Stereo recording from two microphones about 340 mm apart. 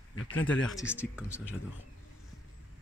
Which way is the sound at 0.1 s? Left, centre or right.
Left.